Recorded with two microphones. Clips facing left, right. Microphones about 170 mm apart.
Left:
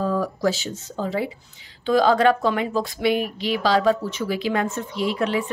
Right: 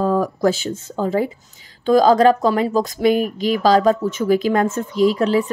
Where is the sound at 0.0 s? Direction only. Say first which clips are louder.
Right 5 dB; 45° right (ahead or behind).